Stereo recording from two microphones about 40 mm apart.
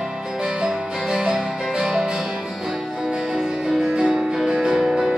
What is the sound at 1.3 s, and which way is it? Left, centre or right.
Music, centre.